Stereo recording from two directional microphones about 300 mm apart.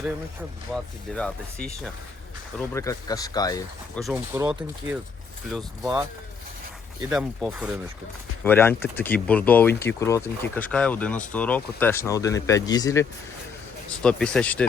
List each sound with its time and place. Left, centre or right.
0.7 s speech: centre
4.0 s speech: centre
7.1 s speech: centre
8.4 s speech: centre